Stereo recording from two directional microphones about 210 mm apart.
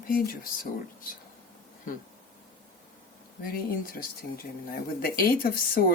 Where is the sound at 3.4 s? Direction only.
45° left (ahead or behind).